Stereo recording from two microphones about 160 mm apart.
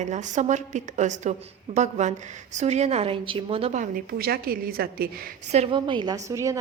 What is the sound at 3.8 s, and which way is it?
A woman's voice, 65° right (ahead or behind).